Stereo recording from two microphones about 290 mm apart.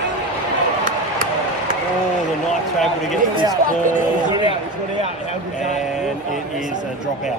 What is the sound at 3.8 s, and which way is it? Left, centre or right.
Speech, right.